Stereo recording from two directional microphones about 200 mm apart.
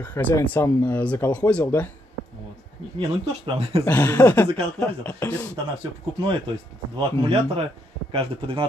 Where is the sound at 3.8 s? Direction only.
10° left (ahead or behind).